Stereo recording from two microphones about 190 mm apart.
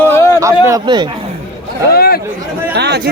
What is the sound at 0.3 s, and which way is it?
Speech, 15° right (ahead or behind).